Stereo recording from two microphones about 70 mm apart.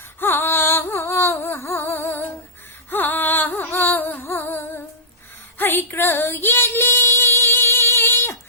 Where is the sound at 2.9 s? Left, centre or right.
Left.